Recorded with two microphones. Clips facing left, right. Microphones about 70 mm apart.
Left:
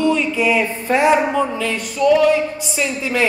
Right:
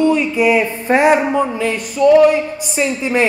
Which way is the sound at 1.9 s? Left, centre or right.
Right.